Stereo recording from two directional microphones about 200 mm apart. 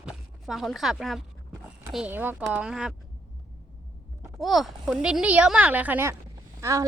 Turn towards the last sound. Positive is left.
turn(degrees=-15)  # may be behind; listen again after turning